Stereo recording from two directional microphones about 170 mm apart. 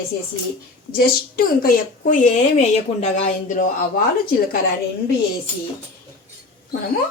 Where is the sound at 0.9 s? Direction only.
60° left (ahead or behind).